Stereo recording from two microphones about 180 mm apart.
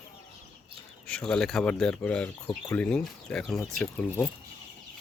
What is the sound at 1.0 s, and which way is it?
Speech, 5° left (ahead or behind).